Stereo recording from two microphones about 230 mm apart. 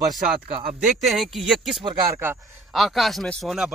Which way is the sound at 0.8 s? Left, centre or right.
Centre.